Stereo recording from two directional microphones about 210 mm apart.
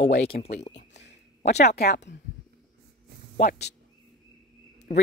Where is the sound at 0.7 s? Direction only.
55° left (ahead or behind).